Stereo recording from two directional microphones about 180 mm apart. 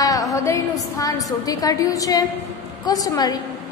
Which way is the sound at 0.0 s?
20° left (ahead or behind).